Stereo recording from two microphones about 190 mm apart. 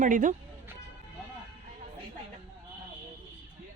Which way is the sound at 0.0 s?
40° right (ahead or behind).